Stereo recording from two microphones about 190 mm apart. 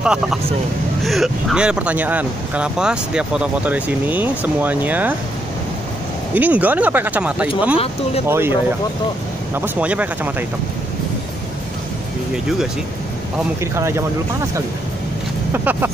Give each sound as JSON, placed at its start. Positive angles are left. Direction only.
{"t": 0.0, "sound": "speech", "side_deg": -5}
{"t": 6.3, "sound": "speech", "side_deg": -10}
{"t": 7.7, "sound": "speech", "side_deg": 30}
{"t": 8.3, "sound": "speech", "side_deg": -10}
{"t": 9.6, "sound": "speech", "side_deg": -10}
{"t": 13.7, "sound": "speech", "side_deg": -15}
{"t": 15.5, "sound": "speech", "side_deg": -10}